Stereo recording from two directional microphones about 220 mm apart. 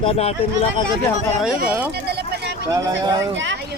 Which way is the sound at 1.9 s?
45° right (ahead or behind).